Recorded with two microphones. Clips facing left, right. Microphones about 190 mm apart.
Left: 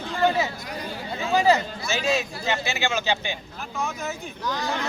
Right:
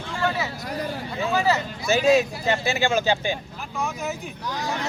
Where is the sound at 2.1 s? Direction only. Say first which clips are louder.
Right 5 dB; 35° right (ahead or behind).